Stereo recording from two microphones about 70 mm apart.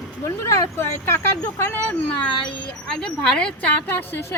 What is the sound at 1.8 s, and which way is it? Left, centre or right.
Speech, centre.